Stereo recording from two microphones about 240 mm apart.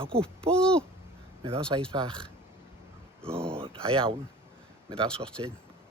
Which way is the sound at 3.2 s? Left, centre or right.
Centre.